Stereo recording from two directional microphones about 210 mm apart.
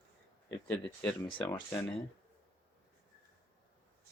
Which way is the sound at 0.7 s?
10° left (ahead or behind).